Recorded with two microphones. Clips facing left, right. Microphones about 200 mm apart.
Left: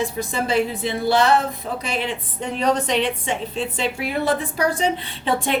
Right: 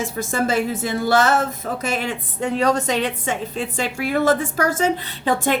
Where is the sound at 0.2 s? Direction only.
45° right (ahead or behind).